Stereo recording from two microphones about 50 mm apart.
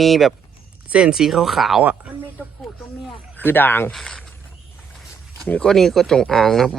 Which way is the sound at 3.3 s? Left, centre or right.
Left.